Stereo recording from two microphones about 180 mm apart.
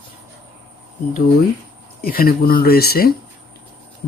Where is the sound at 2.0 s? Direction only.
55° left (ahead or behind).